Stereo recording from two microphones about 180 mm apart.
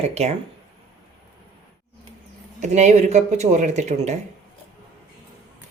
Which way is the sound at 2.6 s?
40° right (ahead or behind).